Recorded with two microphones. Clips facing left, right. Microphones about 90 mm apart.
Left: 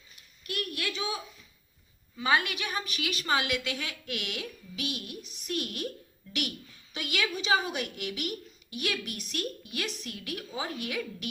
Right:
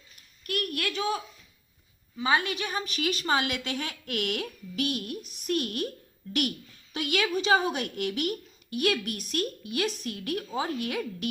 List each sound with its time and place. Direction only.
0.4 s a woman's voice: 50° right (ahead or behind)
2.1 s a woman's voice: 25° right (ahead or behind); by 5.8 s 45° right (ahead or behind)
6.9 s a woman's voice: 45° right (ahead or behind)